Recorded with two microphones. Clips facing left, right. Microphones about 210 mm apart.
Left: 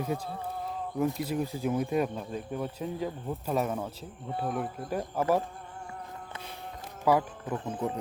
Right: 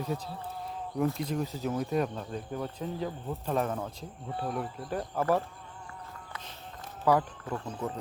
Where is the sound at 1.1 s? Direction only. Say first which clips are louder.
Left 1 dB; 10° left (ahead or behind).